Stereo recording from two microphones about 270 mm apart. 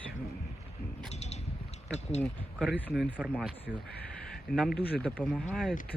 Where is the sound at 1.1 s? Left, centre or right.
Left.